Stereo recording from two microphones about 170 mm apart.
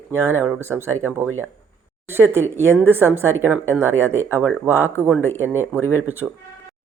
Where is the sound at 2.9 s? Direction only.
15° right (ahead or behind).